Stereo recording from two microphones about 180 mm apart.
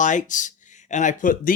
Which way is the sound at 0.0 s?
45° left (ahead or behind).